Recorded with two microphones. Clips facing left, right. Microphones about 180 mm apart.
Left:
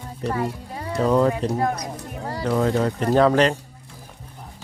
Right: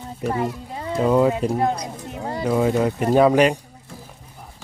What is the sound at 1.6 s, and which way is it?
Speech, 25° right (ahead or behind).